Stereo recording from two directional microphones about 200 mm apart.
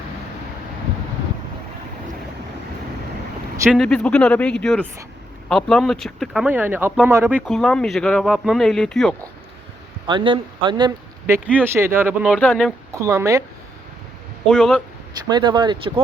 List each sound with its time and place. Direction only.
3.7 s speech: centre (ahead or behind)
7.4 s speech: 5° left (ahead or behind)
10.1 s speech: 25° right (ahead or behind)
11.5 s speech: 10° right (ahead or behind)
13.0 s speech: 15° right (ahead or behind)
14.4 s speech: 5° left (ahead or behind)
15.3 s speech: 20° right (ahead or behind)